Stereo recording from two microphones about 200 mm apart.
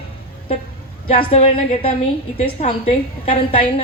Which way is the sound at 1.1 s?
30° left (ahead or behind).